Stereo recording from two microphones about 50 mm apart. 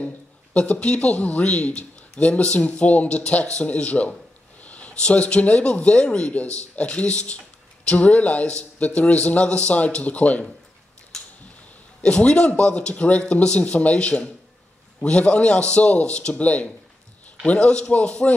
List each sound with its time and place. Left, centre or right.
0.0 s speech: left
12.0 s speech: centre